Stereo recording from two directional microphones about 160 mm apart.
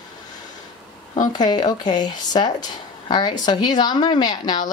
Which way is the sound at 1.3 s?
25° left (ahead or behind).